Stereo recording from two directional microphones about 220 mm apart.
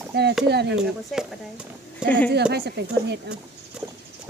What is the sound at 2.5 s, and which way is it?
Speech, 50° right (ahead or behind).